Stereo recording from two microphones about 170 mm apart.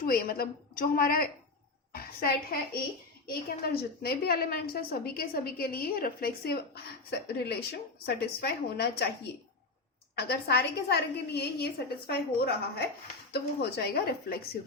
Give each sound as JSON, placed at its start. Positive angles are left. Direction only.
{"t": 0.0, "sound": "a woman's voice", "side_deg": 60}
{"t": 10.2, "sound": "a woman's voice", "side_deg": 75}